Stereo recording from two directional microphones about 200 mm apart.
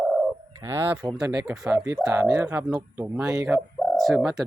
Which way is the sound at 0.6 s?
10° right (ahead or behind).